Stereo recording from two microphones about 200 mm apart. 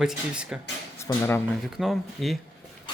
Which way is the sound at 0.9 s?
15° left (ahead or behind).